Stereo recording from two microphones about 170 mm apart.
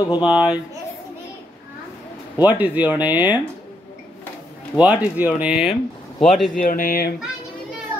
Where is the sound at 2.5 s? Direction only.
10° right (ahead or behind).